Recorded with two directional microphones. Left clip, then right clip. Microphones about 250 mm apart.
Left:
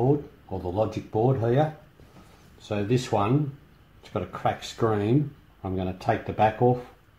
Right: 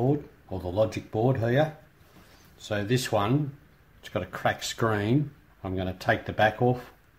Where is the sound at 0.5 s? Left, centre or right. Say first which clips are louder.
Right 1 dB; right.